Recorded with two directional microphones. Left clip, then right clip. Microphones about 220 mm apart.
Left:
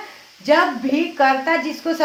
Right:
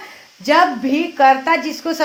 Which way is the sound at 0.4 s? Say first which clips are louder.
Right 2 dB; 45° right (ahead or behind).